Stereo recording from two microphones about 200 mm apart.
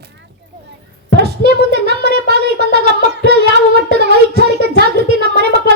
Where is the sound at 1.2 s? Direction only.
55° right (ahead or behind).